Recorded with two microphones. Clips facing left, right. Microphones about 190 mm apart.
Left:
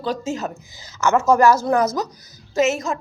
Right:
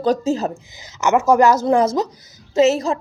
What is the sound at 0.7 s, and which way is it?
A woman's voice, 20° right (ahead or behind).